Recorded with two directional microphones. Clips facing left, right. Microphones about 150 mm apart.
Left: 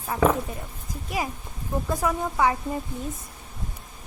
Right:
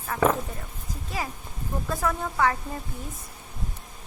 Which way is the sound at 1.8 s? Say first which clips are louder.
Left 1 dB; 15° left (ahead or behind).